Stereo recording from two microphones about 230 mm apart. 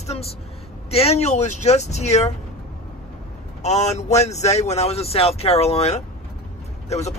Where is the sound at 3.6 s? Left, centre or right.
Left.